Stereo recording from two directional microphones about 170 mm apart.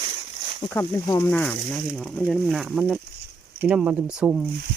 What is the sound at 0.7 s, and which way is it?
Speech, 20° left (ahead or behind).